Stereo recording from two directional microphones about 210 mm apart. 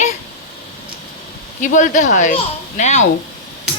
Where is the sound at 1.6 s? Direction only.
35° left (ahead or behind).